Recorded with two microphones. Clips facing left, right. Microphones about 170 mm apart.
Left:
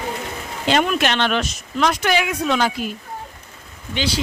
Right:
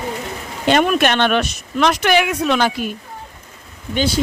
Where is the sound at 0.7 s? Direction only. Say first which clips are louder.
Right 4 dB; 55° right (ahead or behind).